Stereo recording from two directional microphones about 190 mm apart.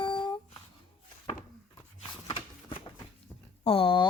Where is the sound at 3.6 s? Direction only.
30° left (ahead or behind).